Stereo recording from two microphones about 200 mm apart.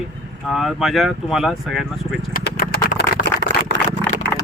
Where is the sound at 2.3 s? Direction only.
50° left (ahead or behind).